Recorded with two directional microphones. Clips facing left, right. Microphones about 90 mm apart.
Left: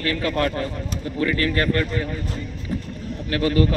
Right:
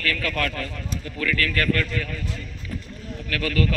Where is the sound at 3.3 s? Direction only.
25° left (ahead or behind).